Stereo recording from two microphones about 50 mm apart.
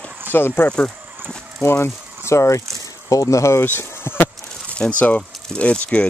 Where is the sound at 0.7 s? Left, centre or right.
Left.